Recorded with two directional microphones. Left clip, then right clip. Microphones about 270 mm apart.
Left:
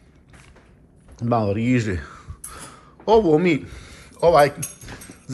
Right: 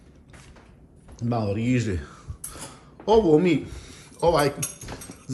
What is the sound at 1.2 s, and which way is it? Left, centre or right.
Speech, centre.